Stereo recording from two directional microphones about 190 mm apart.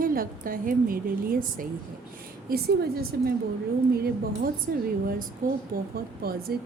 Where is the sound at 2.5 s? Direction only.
55° right (ahead or behind).